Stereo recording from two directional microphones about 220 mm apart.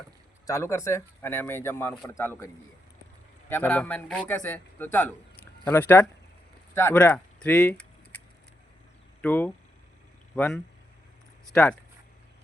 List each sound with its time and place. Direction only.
0.4 s speech: 10° left (ahead or behind)
3.5 s speech: 10° left (ahead or behind)
9.2 s speech: 10° left (ahead or behind)